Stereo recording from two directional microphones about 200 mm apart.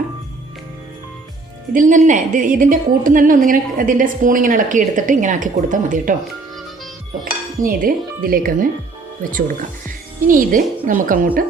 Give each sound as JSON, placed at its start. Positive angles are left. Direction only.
{"t": 1.7, "sound": "a woman's voice", "side_deg": -40}
{"t": 7.6, "sound": "speech", "side_deg": -45}
{"t": 10.2, "sound": "speech", "side_deg": -40}